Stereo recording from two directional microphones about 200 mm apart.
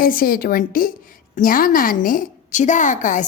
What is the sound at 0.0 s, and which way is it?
A woman's voice, 45° left (ahead or behind).